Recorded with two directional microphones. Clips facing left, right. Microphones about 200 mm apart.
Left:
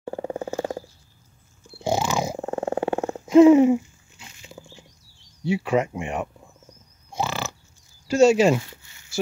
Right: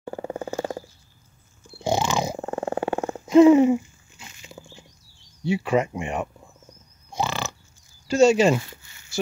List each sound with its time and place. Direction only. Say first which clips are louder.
0.0 s purr: left 2 dB; 25° left (ahead or behind)
1.9 s purr: even; 5° left (ahead or behind)
2.4 s purr: left 1 dB; 20° left (ahead or behind)
3.3 s a sound: left 1 dB; 5° left (ahead or behind)
5.4 s speech: even; centre (ahead or behind)
7.2 s a sound: even; 5° left (ahead or behind)
8.1 s speech: left 1 dB; 5° left (ahead or behind)